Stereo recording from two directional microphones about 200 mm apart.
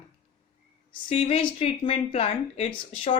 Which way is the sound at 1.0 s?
30° left (ahead or behind).